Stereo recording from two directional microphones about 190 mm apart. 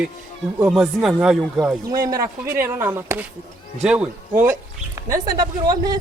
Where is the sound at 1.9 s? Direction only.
20° right (ahead or behind).